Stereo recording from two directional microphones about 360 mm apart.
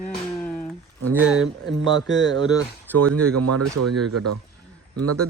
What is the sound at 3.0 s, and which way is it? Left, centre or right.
Speech, right.